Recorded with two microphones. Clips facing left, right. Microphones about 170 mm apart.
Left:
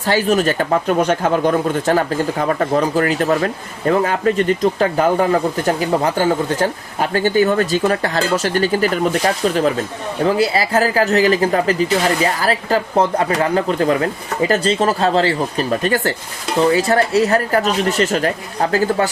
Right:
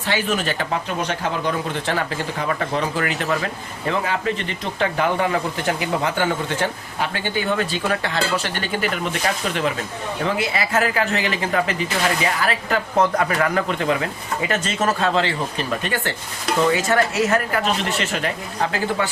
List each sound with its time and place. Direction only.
0.0 s speech: 40° left (ahead or behind)